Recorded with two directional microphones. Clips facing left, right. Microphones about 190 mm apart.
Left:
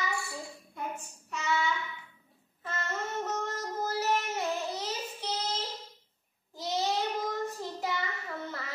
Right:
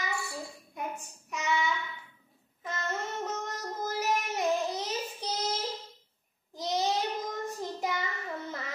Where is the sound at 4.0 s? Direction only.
15° right (ahead or behind).